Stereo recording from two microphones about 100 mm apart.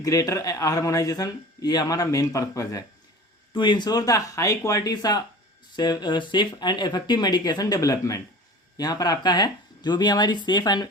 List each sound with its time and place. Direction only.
0.0 s a man's voice: 35° left (ahead or behind)
3.5 s a man's voice: 50° left (ahead or behind)